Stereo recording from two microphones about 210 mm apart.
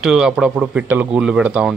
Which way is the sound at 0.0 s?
5° right (ahead or behind).